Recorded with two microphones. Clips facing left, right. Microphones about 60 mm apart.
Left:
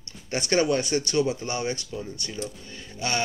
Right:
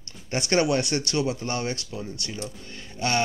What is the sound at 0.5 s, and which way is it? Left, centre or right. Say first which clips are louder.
Speech: even; centre.